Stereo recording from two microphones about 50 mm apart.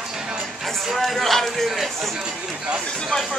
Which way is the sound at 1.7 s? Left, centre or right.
Centre.